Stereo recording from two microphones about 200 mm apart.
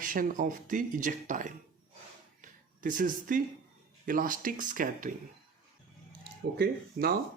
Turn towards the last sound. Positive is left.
turn(degrees=-60)  # may be behind; listen again after turning